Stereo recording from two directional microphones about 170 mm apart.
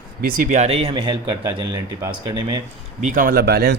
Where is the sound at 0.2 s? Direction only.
55° right (ahead or behind); by 1.8 s 30° right (ahead or behind).